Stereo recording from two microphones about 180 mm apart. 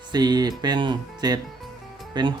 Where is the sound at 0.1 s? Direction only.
25° right (ahead or behind).